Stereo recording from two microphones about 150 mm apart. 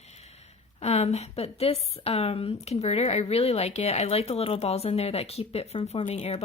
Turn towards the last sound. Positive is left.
turn(degrees=45)  # may be behind; listen again after turning